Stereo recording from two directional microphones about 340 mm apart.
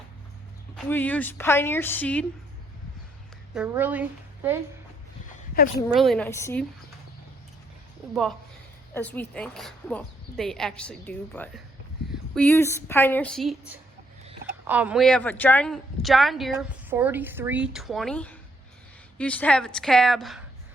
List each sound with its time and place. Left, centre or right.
0.9 s a woman's voice: centre
3.5 s a woman's voice: centre
5.6 s speech: left
6.0 s a woman's voice: centre
8.9 s a woman's voice: centre